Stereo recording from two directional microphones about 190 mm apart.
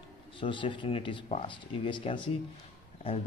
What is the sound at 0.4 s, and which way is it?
A man's voice, 25° left (ahead or behind).